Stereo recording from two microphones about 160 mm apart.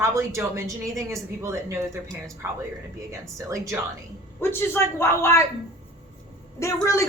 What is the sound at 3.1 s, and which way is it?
Speech, 20° right (ahead or behind).